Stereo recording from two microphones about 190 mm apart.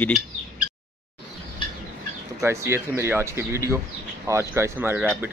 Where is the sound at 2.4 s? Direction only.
15° right (ahead or behind).